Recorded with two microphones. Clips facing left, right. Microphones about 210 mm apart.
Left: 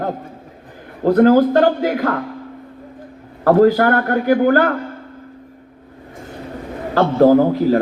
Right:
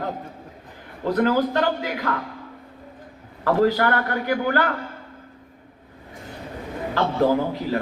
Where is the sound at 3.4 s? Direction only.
45° left (ahead or behind).